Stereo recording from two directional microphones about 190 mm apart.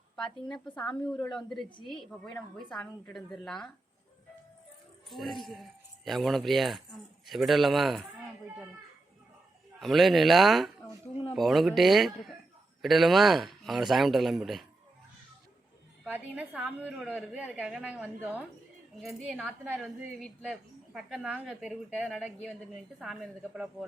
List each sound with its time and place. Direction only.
0.5 s a woman's voice: 5° left (ahead or behind)
5.0 s a woman's voice: centre (ahead or behind)
9.8 s a woman's voice: centre (ahead or behind)
16.0 s a woman's voice: 10° right (ahead or behind)